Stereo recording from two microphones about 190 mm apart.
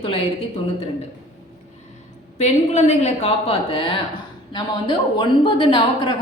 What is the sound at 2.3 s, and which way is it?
A woman's voice, 35° left (ahead or behind).